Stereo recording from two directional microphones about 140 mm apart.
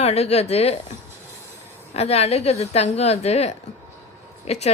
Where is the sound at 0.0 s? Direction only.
50° left (ahead or behind).